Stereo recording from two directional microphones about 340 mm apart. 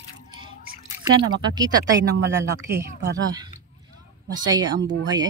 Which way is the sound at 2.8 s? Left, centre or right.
Centre.